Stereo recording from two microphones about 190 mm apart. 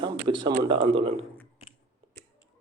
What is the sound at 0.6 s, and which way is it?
Speech, 25° right (ahead or behind).